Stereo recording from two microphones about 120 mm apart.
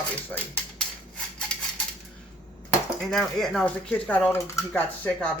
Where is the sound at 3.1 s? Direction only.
5° left (ahead or behind).